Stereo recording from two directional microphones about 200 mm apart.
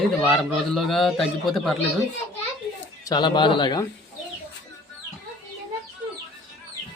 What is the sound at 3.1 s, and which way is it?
Speech, 25° left (ahead or behind).